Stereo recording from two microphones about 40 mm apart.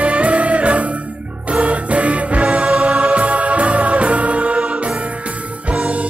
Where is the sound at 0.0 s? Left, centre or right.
Right.